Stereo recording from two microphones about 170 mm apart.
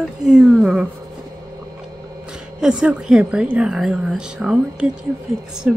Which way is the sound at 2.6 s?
5° right (ahead or behind).